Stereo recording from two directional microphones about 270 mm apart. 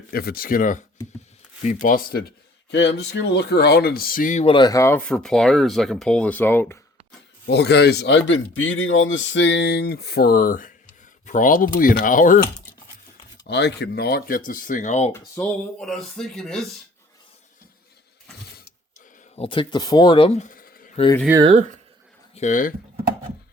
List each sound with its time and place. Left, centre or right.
0.1 s speech: left; by 6.7 s centre
7.4 s speech: left
13.5 s speech: left
15.1 s speech: centre
19.4 s speech: centre
21.2 s speech: centre
21.5 s speech: right
22.4 s speech: left